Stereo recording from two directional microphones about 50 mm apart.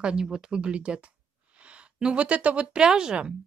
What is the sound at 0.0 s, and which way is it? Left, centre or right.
Speech, centre.